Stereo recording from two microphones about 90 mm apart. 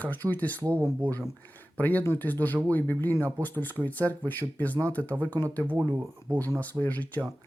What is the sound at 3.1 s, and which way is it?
Speech, 25° right (ahead or behind).